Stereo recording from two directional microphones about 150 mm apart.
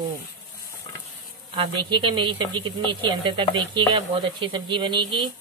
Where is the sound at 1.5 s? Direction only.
35° right (ahead or behind).